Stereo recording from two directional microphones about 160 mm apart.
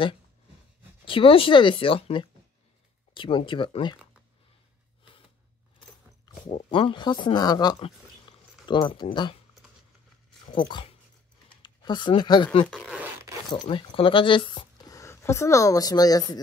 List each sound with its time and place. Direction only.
1.0 s speech: 35° left (ahead or behind)
6.3 s a sound: 25° left (ahead or behind)
6.7 s speech: 30° left (ahead or behind)
10.5 s speech: 30° left (ahead or behind)
12.6 s speech: 5° left (ahead or behind)
12.9 s zipper: 15° right (ahead or behind)
13.5 s speech: 30° left (ahead or behind)